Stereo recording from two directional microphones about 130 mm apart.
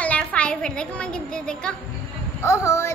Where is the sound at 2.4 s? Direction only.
20° left (ahead or behind).